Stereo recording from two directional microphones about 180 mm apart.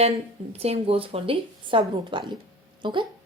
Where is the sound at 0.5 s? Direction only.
35° right (ahead or behind).